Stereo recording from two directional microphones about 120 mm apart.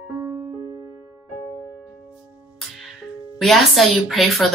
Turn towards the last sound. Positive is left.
turn(degrees=0)  # may be behind; listen again after turning